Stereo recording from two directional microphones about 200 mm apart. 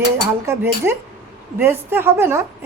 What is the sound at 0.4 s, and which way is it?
A woman's voice, 10° right (ahead or behind).